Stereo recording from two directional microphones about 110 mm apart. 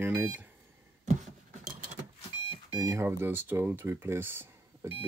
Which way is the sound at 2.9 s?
20° right (ahead or behind).